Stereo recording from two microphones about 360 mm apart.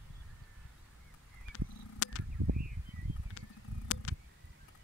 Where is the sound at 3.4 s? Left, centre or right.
Left.